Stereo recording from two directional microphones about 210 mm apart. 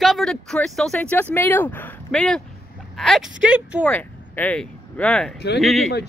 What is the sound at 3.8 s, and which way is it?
Speech, 10° left (ahead or behind).